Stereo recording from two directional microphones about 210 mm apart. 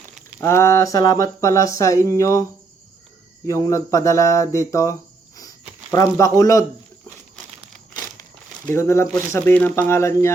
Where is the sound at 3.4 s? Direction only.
15° left (ahead or behind).